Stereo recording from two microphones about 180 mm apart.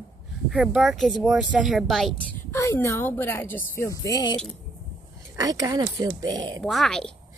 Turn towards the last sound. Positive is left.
turn(degrees=5)  # may be behind; listen again after turning